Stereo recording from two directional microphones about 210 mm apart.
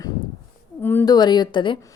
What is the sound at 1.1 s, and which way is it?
Speech, 20° left (ahead or behind).